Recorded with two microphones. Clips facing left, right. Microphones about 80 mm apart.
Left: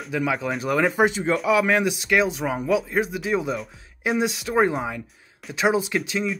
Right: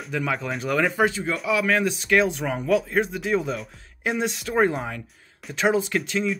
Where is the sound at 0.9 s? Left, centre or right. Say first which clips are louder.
Left 2 dB; left.